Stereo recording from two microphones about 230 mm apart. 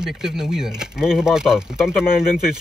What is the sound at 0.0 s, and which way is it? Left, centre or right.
Speech, centre.